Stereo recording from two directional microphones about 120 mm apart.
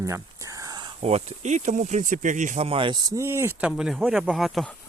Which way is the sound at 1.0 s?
65° right (ahead or behind).